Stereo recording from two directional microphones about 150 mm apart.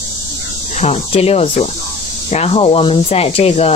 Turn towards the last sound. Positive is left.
turn(degrees=45)  # may be behind; listen again after turning